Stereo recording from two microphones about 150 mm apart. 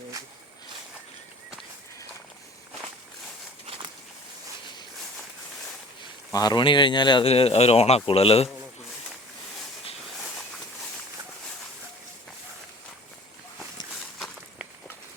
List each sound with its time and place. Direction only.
6.3 s speech: 25° left (ahead or behind)
10.2 s walk: centre (ahead or behind)